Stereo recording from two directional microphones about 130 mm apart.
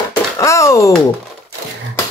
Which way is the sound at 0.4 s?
25° left (ahead or behind).